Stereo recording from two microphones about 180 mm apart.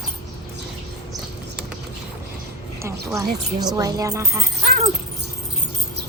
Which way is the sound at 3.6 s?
20° right (ahead or behind).